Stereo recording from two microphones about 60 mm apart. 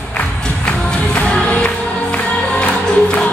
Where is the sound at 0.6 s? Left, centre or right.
Centre.